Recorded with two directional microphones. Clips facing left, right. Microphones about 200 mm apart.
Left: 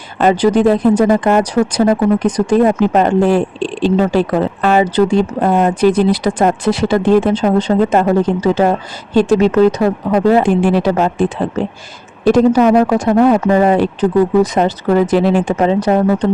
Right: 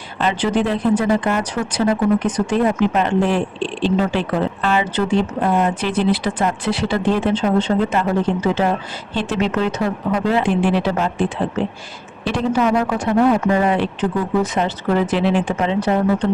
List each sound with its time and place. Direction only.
0.2 s speech: 45° left (ahead or behind)